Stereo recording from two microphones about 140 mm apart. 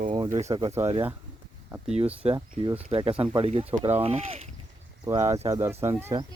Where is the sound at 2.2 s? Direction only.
45° right (ahead or behind).